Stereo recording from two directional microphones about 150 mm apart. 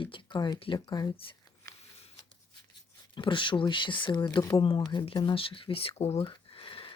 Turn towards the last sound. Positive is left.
turn(degrees=40)  # may be behind; listen again after turning